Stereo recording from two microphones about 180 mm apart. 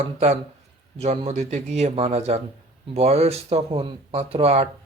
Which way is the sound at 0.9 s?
35° right (ahead or behind).